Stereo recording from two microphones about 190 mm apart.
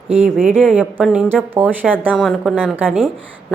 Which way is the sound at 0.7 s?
5° right (ahead or behind).